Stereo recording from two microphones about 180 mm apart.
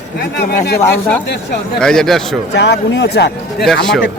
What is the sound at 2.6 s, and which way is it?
Speech, 75° left (ahead or behind).